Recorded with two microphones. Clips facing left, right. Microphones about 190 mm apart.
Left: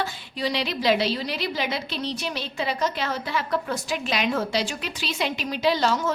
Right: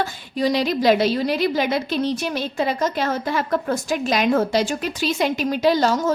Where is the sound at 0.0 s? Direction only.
45° right (ahead or behind).